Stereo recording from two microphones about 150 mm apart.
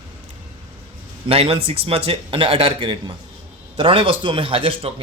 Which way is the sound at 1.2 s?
40° right (ahead or behind).